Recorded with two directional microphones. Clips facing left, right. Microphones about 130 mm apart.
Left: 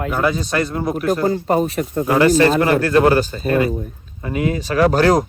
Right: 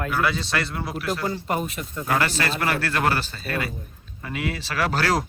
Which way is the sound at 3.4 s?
35° left (ahead or behind).